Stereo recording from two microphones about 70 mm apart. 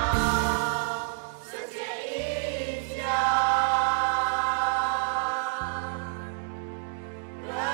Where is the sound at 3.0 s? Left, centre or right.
Centre.